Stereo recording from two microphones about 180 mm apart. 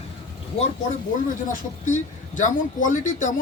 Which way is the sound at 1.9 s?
45° left (ahead or behind).